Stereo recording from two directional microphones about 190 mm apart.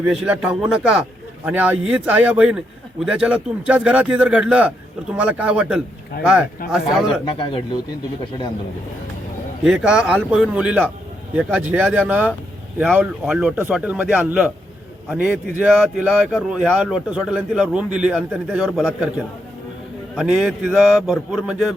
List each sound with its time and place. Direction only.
0.1 s a man's voice: 5° right (ahead or behind)
6.1 s speech: 50° left (ahead or behind)
6.7 s speech: 5° right (ahead or behind)
7.3 s speech: 25° left (ahead or behind)
9.6 s a man's voice: 5° right (ahead or behind)